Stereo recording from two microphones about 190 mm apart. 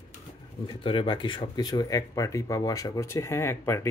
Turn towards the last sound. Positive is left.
turn(degrees=15)  # may be behind; listen again after turning